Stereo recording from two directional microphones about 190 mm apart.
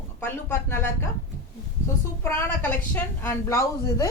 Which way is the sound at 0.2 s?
10° left (ahead or behind).